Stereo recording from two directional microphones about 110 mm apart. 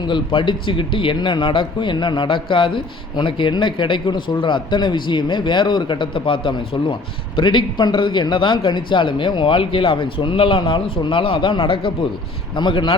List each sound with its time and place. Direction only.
0.0 s speech: 45° left (ahead or behind)
12.5 s speech: 45° left (ahead or behind)